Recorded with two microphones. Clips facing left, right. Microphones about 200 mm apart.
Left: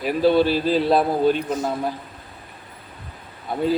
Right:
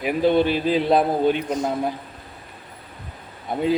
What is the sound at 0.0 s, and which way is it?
Speech, 20° right (ahead or behind).